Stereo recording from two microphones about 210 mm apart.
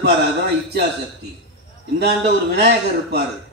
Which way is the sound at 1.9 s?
50° right (ahead or behind).